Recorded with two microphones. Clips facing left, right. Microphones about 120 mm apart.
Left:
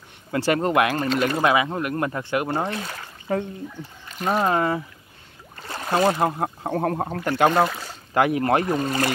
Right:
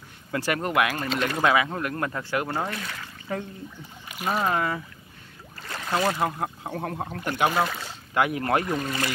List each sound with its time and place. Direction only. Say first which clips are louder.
0.3 s speech: left 5 dB; 30° left (ahead or behind)
1.0 s speech: left 5 dB; centre (ahead or behind)
1.4 s speech: left 2 dB; 20° left (ahead or behind)
4.1 s a sound: left 4 dB; 10° right (ahead or behind)
4.4 s speech: left 4 dB; 30° left (ahead or behind)
6.7 s speech: left 7 dB; 45° left (ahead or behind)
8.1 s speech: left 4 dB; 30° left (ahead or behind)